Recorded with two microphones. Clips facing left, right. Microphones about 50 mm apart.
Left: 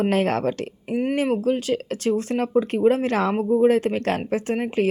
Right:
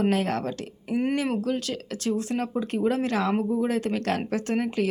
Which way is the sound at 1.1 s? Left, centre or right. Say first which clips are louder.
Left 5 dB; left.